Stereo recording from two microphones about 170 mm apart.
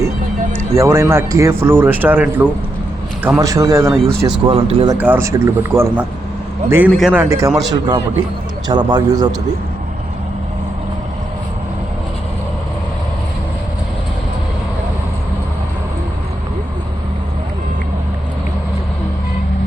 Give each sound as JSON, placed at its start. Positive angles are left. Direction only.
{"t": 0.5, "sound": "speech", "side_deg": -15}
{"t": 4.4, "sound": "speech", "side_deg": -30}
{"t": 4.9, "sound": "speech", "side_deg": -10}